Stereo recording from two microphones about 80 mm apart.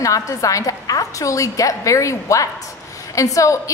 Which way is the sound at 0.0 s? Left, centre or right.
Left.